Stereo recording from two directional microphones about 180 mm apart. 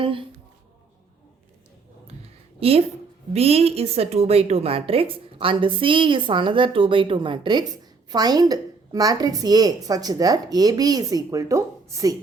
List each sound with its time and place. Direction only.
0.0 s a woman's voice: 30° right (ahead or behind)
2.6 s a woman's voice: 35° right (ahead or behind); by 12.1 s 15° right (ahead or behind)